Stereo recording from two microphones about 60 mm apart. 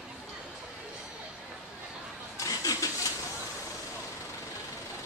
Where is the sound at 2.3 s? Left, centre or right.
Left.